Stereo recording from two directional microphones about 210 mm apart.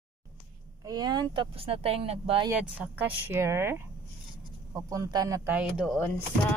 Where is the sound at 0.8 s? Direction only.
20° right (ahead or behind).